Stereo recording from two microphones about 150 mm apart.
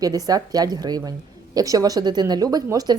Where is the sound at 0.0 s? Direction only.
25° right (ahead or behind).